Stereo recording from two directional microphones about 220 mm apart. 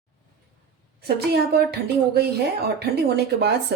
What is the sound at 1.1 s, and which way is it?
Speech, 45° right (ahead or behind).